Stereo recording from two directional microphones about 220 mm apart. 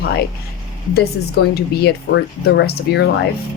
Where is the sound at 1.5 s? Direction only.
45° left (ahead or behind).